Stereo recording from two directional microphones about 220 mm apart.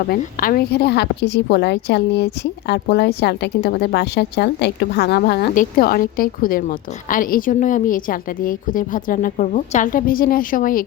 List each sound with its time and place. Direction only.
0.0 s a woman's voice: 40° left (ahead or behind)